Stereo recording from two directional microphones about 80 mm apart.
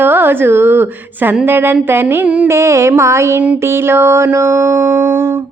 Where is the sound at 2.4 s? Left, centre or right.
Right.